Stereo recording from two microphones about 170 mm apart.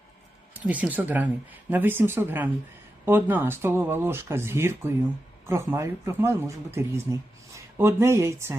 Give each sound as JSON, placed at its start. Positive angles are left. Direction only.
{"t": 0.5, "sound": "speech", "side_deg": -10}